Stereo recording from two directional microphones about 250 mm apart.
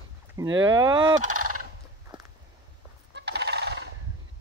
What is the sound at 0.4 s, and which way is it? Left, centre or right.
Speech, centre.